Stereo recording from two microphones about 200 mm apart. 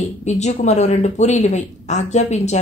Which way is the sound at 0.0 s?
35° left (ahead or behind).